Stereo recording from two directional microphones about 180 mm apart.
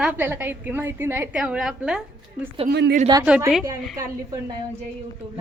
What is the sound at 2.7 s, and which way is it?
Speech, 70° right (ahead or behind).